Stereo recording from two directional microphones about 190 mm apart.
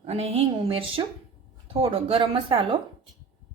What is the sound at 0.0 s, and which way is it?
Speech, 35° right (ahead or behind).